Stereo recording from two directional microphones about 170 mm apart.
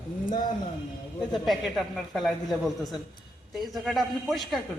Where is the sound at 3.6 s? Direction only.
Centre (ahead or behind).